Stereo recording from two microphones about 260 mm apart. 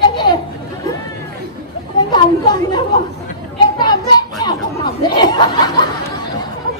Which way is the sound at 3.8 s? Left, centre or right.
Centre.